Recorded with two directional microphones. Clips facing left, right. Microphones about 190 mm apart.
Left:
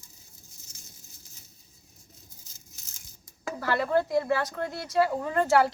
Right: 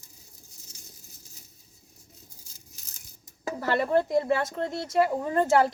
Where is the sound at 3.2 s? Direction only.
20° right (ahead or behind).